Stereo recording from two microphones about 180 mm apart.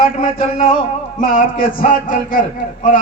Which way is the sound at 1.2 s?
50° left (ahead or behind).